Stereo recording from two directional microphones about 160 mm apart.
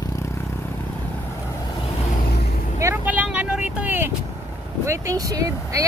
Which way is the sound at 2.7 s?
15° right (ahead or behind).